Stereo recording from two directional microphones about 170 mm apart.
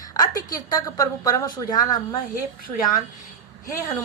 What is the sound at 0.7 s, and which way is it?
A woman's voice, 20° left (ahead or behind).